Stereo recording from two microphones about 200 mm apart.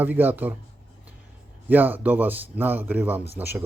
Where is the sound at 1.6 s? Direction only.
10° right (ahead or behind).